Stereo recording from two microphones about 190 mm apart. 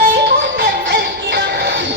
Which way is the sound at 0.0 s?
50° right (ahead or behind).